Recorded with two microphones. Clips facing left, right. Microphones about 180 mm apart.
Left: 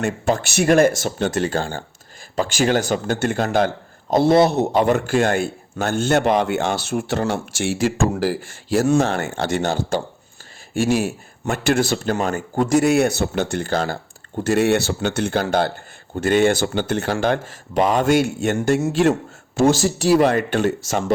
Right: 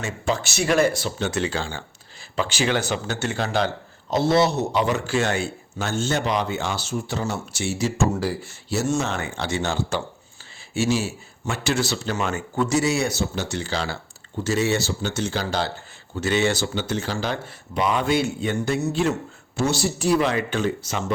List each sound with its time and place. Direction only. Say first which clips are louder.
0.0 s speech: left 5 dB; 55° left (ahead or behind); by 7.7 s 75° left (ahead or behind)
7.8 s speech: left 3 dB; 90° left
9.0 s speech: left 7 dB; 50° left (ahead or behind)
17.7 s speech: left 5 dB; 45° left (ahead or behind)
19.6 s speech: left 6 dB; 90° left
20.1 s speech: left 5 dB; 50° left (ahead or behind); by 20.9 s 70° left (ahead or behind)